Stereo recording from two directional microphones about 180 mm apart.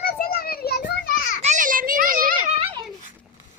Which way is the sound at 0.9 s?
55° left (ahead or behind).